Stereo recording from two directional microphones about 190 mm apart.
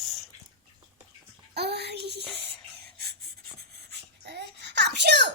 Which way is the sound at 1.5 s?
60° right (ahead or behind).